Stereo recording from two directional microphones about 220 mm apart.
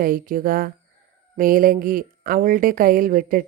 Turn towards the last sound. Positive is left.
turn(degrees=-40)  # may be behind; listen again after turning